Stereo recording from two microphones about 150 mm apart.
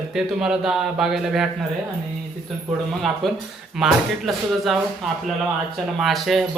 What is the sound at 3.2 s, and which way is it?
Speech, centre (ahead or behind).